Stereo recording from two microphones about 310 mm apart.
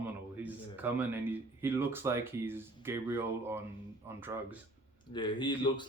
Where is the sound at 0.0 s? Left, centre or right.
Centre.